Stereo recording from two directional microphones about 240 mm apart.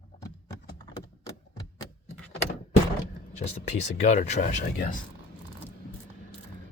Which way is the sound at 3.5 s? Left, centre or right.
Left.